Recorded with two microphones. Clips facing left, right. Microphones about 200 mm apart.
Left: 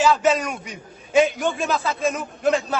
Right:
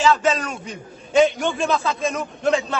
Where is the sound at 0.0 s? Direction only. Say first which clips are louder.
Even; 10° left (ahead or behind).